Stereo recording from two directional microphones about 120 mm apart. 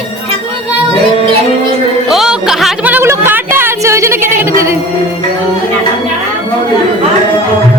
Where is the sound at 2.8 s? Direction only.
15° right (ahead or behind).